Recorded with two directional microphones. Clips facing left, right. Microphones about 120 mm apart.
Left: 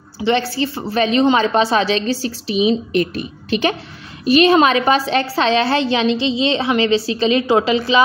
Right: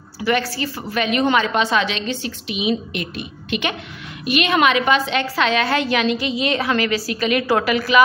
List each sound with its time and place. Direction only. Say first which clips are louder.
0.2 s a woman's voice: left 3 dB; 25° left (ahead or behind)